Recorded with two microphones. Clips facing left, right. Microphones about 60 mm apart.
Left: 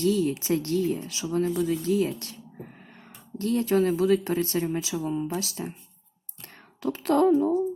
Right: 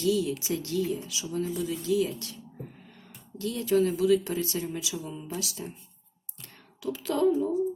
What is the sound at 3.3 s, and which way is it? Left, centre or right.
Speech, left.